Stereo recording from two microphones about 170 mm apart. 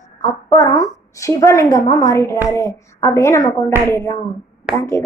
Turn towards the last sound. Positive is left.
turn(degrees=15)  # may be behind; listen again after turning